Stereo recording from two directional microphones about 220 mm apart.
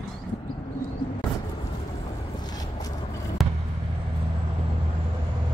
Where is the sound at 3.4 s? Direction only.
Centre (ahead or behind).